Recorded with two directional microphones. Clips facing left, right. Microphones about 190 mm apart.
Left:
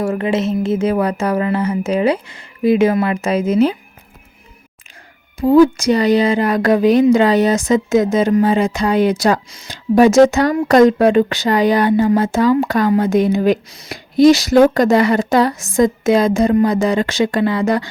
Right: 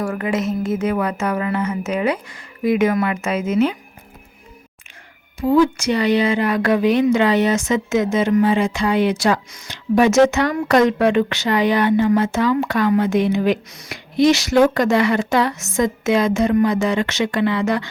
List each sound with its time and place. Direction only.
0.0 s speech: 25° left (ahead or behind)
5.4 s speech: 35° left (ahead or behind)